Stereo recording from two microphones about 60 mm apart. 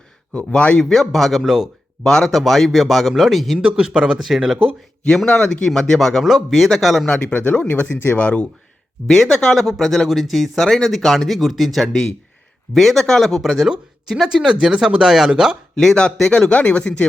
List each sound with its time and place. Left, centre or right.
0.3 s speech: left
0.8 s speech: centre
3.6 s speech: centre
5.0 s a man's voice: centre
7.5 s speech: centre
9.0 s speech: centre
15.7 s a man's voice: centre
16.5 s speech: left